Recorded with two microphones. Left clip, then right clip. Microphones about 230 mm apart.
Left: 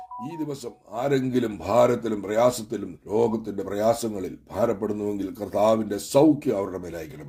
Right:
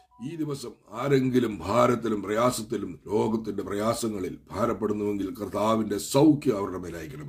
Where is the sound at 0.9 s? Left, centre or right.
Centre.